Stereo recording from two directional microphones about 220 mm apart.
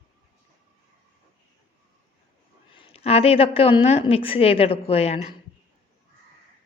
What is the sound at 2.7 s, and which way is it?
A woman's voice, 25° left (ahead or behind).